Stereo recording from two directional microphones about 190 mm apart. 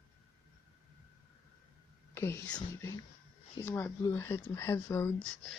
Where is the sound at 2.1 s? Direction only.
15° left (ahead or behind).